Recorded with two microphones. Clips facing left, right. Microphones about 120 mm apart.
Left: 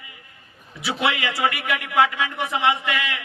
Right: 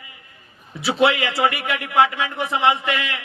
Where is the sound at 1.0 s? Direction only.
25° right (ahead or behind).